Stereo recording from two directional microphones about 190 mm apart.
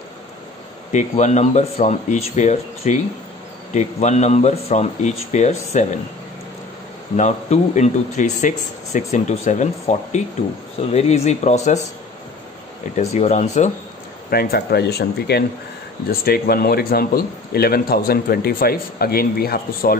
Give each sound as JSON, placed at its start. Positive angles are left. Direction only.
{"t": 0.9, "sound": "speech", "side_deg": 40}
{"t": 7.2, "sound": "speech", "side_deg": 35}
{"t": 12.9, "sound": "speech", "side_deg": 35}
{"t": 14.3, "sound": "a man's voice", "side_deg": 55}